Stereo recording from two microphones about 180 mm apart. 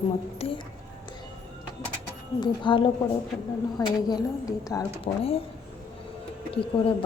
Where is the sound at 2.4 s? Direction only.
25° left (ahead or behind).